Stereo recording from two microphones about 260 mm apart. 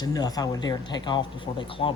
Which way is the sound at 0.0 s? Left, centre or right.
Centre.